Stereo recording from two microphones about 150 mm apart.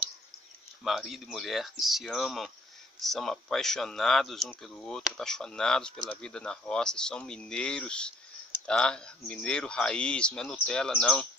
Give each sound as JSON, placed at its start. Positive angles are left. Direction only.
{"t": 0.8, "sound": "speech", "side_deg": 0}